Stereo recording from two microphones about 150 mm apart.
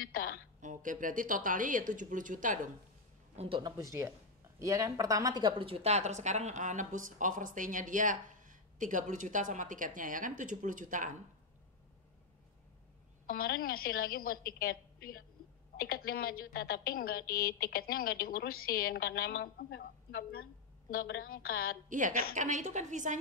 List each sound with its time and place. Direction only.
0.0 s a sound: 75° left (ahead or behind)
0.6 s a woman's voice: 60° right (ahead or behind)
3.3 s speech: 35° right (ahead or behind)
3.6 s a woman's voice: 20° right (ahead or behind); by 11.1 s 60° right (ahead or behind)
13.3 s a woman's voice: 80° left
20.9 s a woman's voice: 75° left (ahead or behind)
21.8 s a woman's voice: 60° right (ahead or behind)